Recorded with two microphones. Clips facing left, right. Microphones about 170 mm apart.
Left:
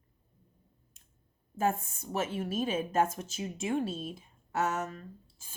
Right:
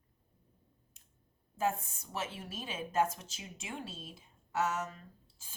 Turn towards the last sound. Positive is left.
turn(degrees=50)  # may be behind; listen again after turning